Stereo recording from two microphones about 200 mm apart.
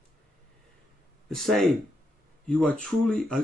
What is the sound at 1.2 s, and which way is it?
Speech, centre (ahead or behind).